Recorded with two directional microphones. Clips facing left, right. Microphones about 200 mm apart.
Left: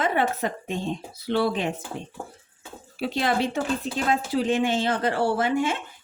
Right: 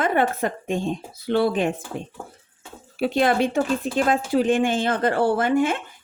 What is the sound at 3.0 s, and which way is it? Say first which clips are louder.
Speech: right 5 dB; 55° right (ahead or behind).